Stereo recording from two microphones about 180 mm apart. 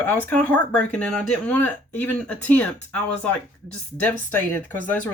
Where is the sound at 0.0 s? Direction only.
10° left (ahead or behind).